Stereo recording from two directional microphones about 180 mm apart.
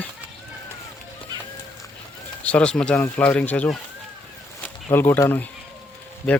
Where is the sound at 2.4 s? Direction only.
5° left (ahead or behind).